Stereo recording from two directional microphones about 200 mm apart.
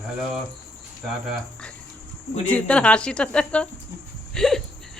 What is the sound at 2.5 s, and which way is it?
Speech, 5° left (ahead or behind).